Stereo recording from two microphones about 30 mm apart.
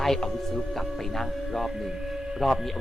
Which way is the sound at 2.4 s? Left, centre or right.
Centre.